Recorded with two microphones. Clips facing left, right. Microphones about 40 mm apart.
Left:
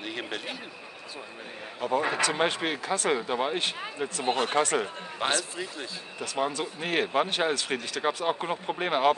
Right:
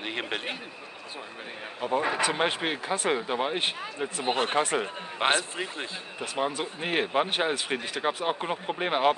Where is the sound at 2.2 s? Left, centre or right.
Centre.